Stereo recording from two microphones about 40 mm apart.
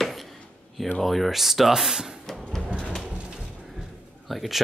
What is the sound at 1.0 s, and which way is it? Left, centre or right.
Speech, centre.